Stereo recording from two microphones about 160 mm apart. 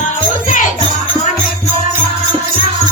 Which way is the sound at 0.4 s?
55° left (ahead or behind).